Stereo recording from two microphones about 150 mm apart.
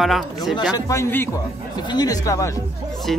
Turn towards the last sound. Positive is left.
turn(degrees=0)  # may be behind; listen again after turning